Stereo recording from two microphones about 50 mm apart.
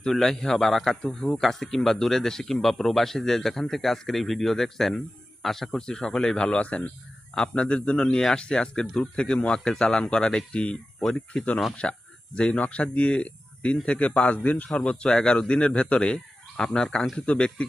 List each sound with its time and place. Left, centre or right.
0.0 s speech: centre
5.7 s speech: centre
11.0 s speech: centre
11.8 s speech: left
14.8 s speech: centre
16.6 s speech: centre